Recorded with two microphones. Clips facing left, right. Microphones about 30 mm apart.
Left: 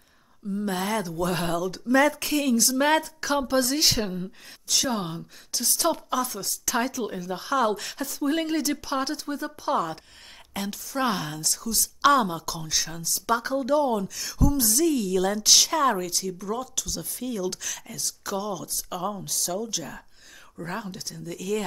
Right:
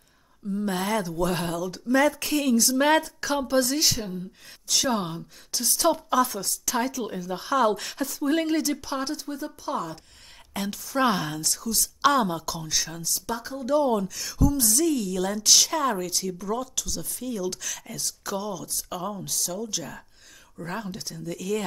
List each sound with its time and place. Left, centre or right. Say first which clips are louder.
0.5 s a woman's voice: right 1 dB; centre
3.8 s speech: left 2 dB; left
4.6 s a woman's voice: right 1 dB; centre; by 9.9 s left
10.5 s a woman's voice: right 2 dB; centre
13.3 s speech: left 9 dB; left
13.7 s a woman's voice: right 1 dB; centre